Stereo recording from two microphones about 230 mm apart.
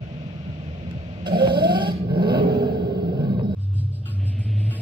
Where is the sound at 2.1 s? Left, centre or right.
Centre.